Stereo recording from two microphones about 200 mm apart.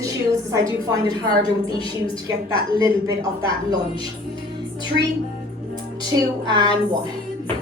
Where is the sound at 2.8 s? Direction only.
20° right (ahead or behind).